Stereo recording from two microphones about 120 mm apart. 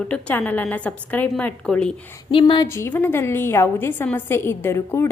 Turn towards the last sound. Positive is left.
turn(degrees=20)  # may be behind; listen again after turning